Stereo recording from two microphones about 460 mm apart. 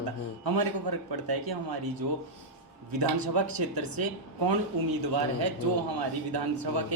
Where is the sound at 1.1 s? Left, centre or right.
Right.